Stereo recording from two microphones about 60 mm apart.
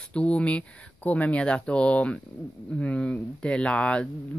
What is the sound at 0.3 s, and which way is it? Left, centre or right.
Speech, centre.